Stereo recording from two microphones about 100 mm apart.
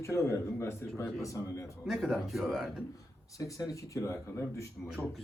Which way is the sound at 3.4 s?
35° left (ahead or behind).